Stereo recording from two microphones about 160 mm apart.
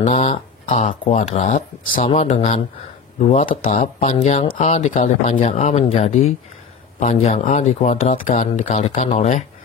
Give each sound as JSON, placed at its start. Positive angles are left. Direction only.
{"t": 0.0, "sound": "speech", "side_deg": 45}